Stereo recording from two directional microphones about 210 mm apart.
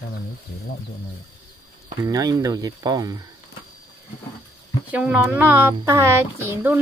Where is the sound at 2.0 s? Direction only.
15° right (ahead or behind).